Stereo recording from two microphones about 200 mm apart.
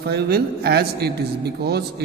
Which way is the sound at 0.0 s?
55° right (ahead or behind).